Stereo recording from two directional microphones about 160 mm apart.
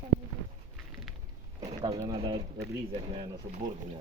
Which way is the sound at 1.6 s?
30° right (ahead or behind).